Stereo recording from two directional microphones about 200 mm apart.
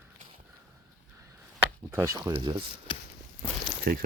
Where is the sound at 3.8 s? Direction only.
45° right (ahead or behind).